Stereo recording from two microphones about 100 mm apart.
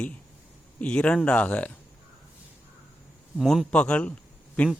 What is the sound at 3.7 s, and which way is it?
Speech, 10° left (ahead or behind).